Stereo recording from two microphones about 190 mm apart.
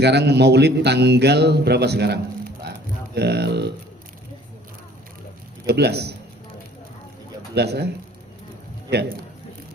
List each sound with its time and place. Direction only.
0.0 s a man's voice: 60° right (ahead or behind)
5.6 s a man's voice: 60° right (ahead or behind)
7.5 s a man's voice: 60° right (ahead or behind)
8.9 s a man's voice: 60° right (ahead or behind)